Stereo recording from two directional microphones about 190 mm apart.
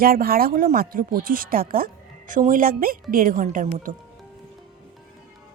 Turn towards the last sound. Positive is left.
turn(degrees=-45)  # may be behind; listen again after turning